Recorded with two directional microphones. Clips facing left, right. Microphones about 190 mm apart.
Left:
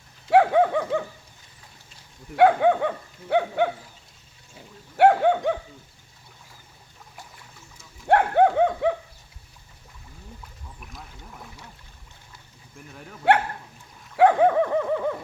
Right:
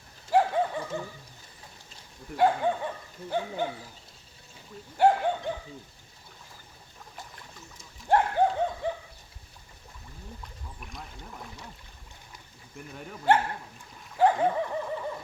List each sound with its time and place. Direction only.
0.3 s dog: 65° left (ahead or behind)
2.3 s dog: 65° left (ahead or behind)
4.9 s speech: 65° left (ahead or behind)
8.0 s dog: 65° left (ahead or behind)
10.4 s rowboat: centre (ahead or behind)
13.2 s dog: 65° left (ahead or behind)